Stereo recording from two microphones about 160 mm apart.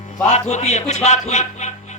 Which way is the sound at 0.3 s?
45° left (ahead or behind).